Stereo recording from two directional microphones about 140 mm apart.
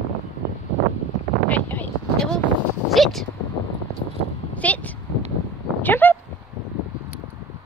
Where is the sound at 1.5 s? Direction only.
10° left (ahead or behind).